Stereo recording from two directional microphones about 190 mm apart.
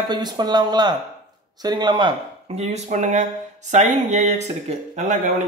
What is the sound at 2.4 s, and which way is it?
Speech, 35° right (ahead or behind).